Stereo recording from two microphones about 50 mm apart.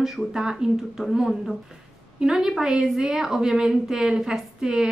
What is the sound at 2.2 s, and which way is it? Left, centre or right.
A woman's voice, centre.